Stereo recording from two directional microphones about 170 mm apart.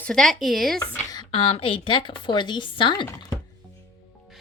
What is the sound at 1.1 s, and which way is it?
A woman's voice, 30° left (ahead or behind).